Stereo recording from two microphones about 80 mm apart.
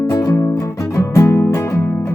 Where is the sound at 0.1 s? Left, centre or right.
Left.